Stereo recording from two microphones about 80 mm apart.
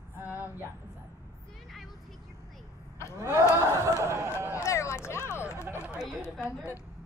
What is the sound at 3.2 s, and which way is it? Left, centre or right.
Speech, right.